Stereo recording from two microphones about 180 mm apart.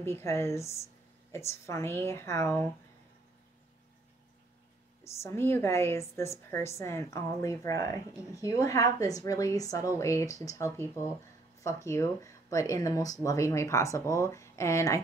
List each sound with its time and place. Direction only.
0.0 s a woman's voice: 15° left (ahead or behind)
5.0 s a woman's voice: 15° left (ahead or behind)